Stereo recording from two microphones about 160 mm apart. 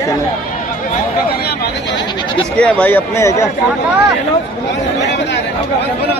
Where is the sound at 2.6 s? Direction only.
10° left (ahead or behind).